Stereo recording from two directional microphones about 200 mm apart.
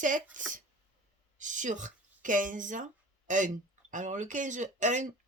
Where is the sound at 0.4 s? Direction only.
40° right (ahead or behind).